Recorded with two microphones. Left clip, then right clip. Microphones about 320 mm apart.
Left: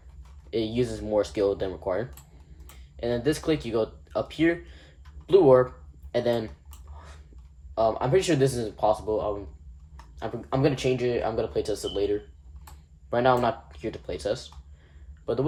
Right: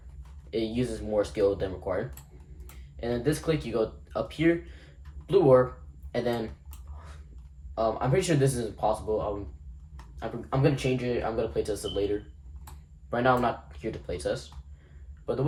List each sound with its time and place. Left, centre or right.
0.5 s speech: left
7.8 s speech: left